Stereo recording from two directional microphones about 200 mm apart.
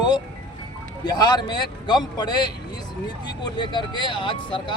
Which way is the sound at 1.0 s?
20° left (ahead or behind).